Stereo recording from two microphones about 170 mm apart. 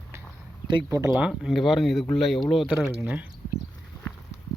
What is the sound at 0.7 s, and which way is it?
Speech, 25° right (ahead or behind).